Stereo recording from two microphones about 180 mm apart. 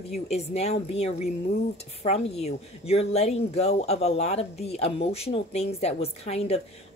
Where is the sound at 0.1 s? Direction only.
35° left (ahead or behind).